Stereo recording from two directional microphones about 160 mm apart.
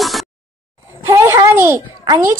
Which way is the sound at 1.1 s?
20° right (ahead or behind).